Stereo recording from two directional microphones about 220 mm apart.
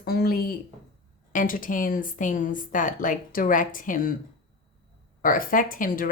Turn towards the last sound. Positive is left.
turn(degrees=40)  # may be behind; listen again after turning